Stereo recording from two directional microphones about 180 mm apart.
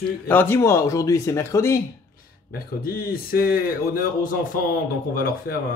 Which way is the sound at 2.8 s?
55° left (ahead or behind).